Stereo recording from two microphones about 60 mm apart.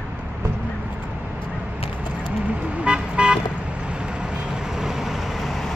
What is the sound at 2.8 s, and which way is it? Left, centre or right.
Vehicle, centre.